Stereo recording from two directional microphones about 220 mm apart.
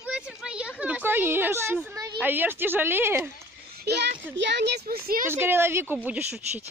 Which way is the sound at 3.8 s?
50° right (ahead or behind).